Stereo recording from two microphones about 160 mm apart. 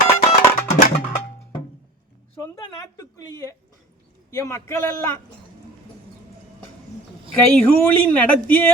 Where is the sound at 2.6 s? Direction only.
20° left (ahead or behind).